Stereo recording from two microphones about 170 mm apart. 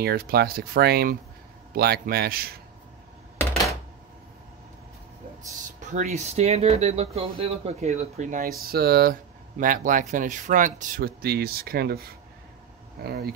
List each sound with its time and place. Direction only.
0.0 s speech: 65° right (ahead or behind)
5.8 s speech: 45° right (ahead or behind); by 9.1 s 65° right (ahead or behind)
9.6 s speech: 50° right (ahead or behind)
11.2 s speech: 65° right (ahead or behind)